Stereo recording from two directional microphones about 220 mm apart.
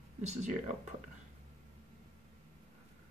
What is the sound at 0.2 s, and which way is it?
Speech, 30° right (ahead or behind).